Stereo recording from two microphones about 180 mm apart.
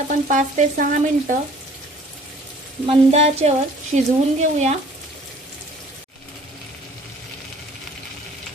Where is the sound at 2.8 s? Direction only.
35° right (ahead or behind).